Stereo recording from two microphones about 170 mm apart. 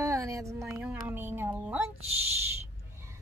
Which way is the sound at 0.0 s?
20° right (ahead or behind).